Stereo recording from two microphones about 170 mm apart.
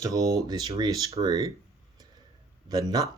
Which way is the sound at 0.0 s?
20° right (ahead or behind).